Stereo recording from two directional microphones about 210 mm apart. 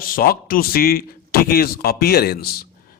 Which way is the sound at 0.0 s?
45° left (ahead or behind).